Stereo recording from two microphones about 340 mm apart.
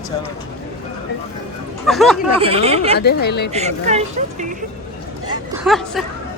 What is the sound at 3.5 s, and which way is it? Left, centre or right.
Speech, centre.